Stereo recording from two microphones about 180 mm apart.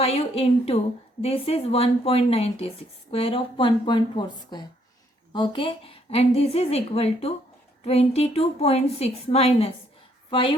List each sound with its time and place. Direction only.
0.0 s a woman's voice: 35° left (ahead or behind)